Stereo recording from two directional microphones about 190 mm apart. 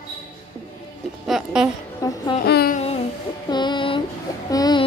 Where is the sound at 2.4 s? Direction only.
55° left (ahead or behind).